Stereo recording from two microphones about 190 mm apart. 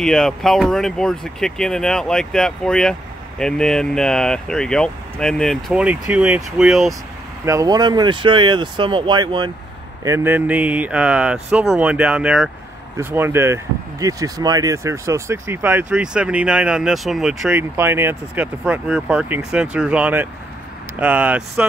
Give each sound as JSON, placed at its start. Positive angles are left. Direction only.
{"t": 0.0, "sound": "speech", "side_deg": 5}
{"t": 7.4, "sound": "speech", "side_deg": -20}
{"t": 10.0, "sound": "speech", "side_deg": -10}